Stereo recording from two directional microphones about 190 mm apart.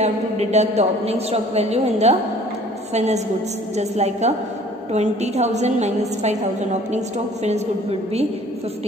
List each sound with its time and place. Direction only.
0.0 s a woman's voice: 35° right (ahead or behind)